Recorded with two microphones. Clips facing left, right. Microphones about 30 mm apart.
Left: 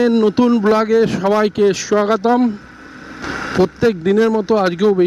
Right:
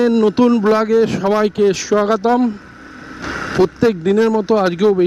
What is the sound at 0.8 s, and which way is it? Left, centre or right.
Speech, centre.